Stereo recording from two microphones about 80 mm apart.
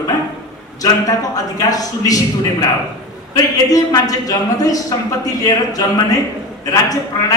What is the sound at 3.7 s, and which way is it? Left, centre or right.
Speech, left.